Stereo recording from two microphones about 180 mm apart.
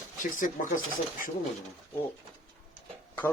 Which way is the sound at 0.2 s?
45° left (ahead or behind).